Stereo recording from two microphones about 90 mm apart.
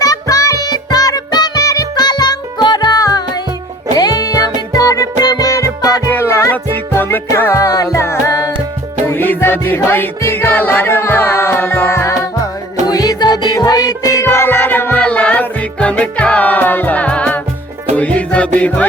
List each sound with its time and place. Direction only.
0.0 s music: 40° left (ahead or behind)
6.1 s music: 30° left (ahead or behind)
7.6 s music: 40° left (ahead or behind)
9.1 s music: 20° left (ahead or behind)
12.9 s music: 45° left (ahead or behind); by 18.9 s 15° left (ahead or behind)